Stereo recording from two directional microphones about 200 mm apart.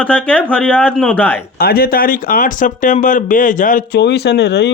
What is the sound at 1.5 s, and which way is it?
Speech, 50° left (ahead or behind).